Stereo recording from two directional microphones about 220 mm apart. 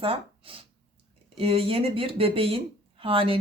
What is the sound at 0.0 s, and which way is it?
Speech, 25° right (ahead or behind).